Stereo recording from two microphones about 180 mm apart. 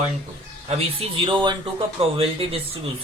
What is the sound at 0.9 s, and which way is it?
Speech, 30° right (ahead or behind).